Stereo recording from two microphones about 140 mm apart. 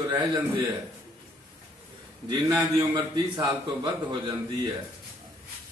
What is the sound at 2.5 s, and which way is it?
A man's voice, 25° right (ahead or behind).